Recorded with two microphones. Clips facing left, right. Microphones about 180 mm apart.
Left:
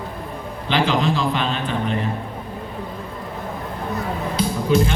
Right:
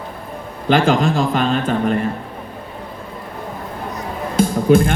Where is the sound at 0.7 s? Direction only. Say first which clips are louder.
Right 5 dB; 45° right (ahead or behind).